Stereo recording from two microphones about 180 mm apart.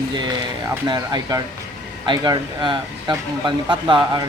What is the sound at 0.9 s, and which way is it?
Speech, 20° right (ahead or behind).